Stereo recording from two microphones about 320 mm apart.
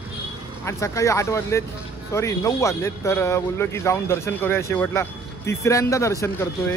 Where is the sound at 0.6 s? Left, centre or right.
Centre.